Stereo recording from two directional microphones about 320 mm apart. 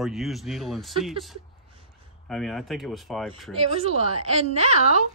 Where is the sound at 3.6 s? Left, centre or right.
Centre.